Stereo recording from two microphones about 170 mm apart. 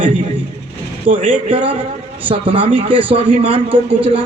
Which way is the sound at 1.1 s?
50° right (ahead or behind).